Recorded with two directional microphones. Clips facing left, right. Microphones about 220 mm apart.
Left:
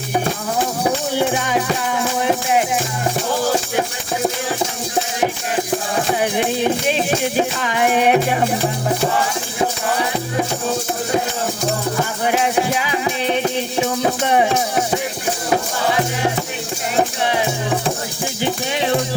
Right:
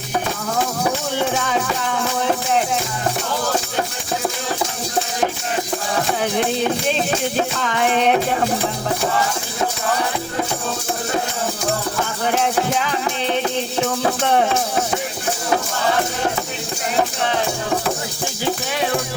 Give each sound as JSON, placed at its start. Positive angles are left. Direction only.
{"t": 1.1, "sound": "music", "side_deg": 5}
{"t": 7.3, "sound": "music", "side_deg": 10}
{"t": 12.2, "sound": "music", "side_deg": 10}
{"t": 18.4, "sound": "music", "side_deg": 20}